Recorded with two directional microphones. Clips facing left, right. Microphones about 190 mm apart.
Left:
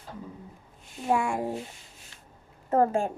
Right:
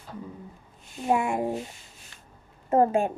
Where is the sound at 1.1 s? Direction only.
20° right (ahead or behind).